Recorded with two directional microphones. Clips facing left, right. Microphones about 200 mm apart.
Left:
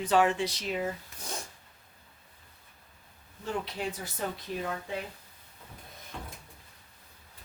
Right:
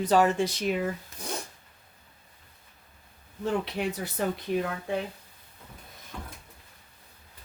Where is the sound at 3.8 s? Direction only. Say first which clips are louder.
Right 5 dB; 60° right (ahead or behind).